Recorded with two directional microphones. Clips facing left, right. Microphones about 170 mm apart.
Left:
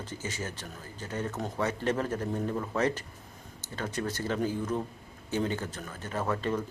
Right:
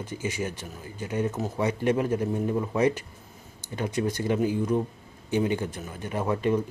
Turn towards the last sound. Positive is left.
turn(degrees=-15)  # may be behind; listen again after turning